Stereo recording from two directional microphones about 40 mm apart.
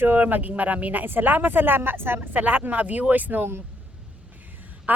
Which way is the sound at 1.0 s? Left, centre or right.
Right.